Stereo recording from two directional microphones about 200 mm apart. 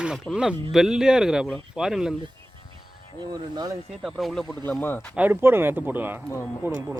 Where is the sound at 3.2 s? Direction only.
20° right (ahead or behind).